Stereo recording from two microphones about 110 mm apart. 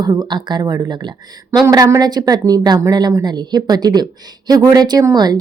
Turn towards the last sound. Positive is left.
turn(degrees=-35)  # may be behind; listen again after turning